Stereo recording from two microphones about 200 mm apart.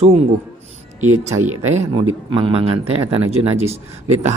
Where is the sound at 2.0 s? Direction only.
25° right (ahead or behind).